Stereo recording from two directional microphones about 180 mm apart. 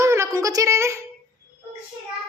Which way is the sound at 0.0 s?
15° right (ahead or behind).